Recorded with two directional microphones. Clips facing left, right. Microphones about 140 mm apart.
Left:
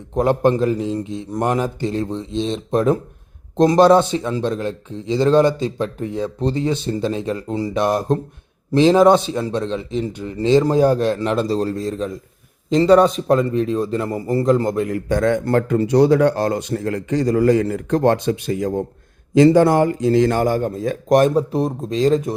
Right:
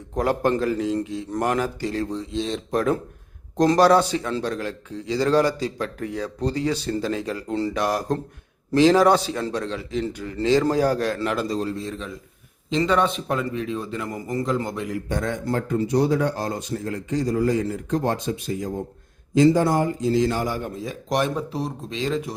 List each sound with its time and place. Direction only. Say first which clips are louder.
0.1 s a man's voice: left 5 dB; 20° left (ahead or behind); by 22.4 s 40° left (ahead or behind)